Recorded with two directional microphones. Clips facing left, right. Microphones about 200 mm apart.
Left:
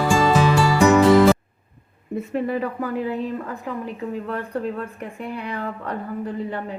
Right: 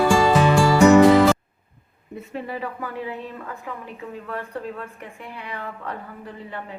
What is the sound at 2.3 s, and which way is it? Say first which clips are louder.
A woman's voice: left 6 dB; 50° left (ahead or behind).